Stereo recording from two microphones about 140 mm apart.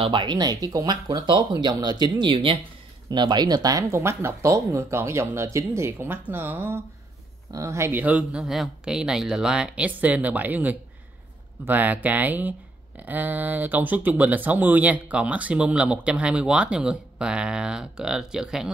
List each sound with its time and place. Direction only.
0.0 s speech: 35° right (ahead or behind); by 18.7 s 5° right (ahead or behind)